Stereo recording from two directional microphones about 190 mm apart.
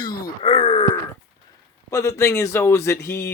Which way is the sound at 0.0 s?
25° left (ahead or behind).